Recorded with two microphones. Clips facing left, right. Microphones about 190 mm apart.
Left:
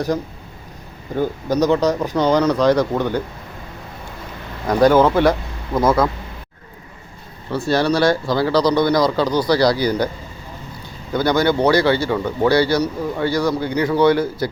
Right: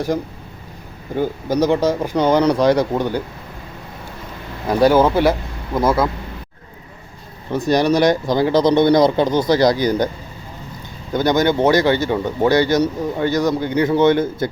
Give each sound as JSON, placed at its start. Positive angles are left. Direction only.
{"t": 1.7, "sound": "speech", "side_deg": -15}
{"t": 4.8, "sound": "speech", "side_deg": -10}
{"t": 7.5, "sound": "speech", "side_deg": -15}
{"t": 11.1, "sound": "speech", "side_deg": -20}